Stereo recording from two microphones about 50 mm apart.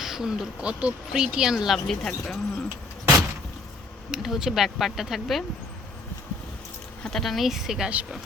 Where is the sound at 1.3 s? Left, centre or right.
Centre.